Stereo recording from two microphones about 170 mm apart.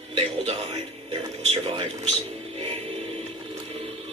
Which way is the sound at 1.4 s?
35° right (ahead or behind).